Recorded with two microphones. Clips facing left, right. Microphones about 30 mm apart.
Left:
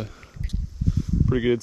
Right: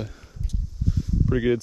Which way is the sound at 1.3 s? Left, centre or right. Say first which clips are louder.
Even; centre.